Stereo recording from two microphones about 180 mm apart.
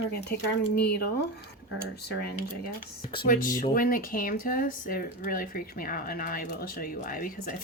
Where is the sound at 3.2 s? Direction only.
50° left (ahead or behind).